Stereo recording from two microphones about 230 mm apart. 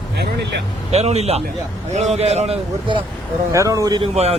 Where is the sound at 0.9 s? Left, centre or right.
Right.